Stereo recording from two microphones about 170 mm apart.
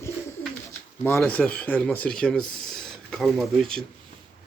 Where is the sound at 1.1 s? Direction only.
10° left (ahead or behind).